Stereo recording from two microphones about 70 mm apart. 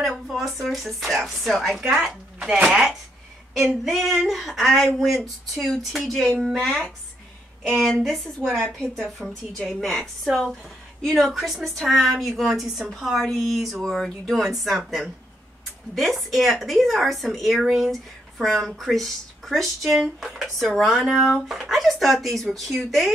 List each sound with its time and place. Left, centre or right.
0.0 s speech: centre
2.7 s a woman's voice: centre
15.9 s a woman's voice: centre